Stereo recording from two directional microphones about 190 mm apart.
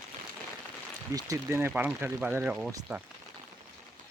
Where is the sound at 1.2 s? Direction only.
15° right (ahead or behind).